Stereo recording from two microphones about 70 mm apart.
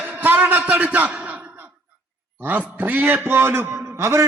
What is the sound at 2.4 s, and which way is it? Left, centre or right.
A man's voice, right.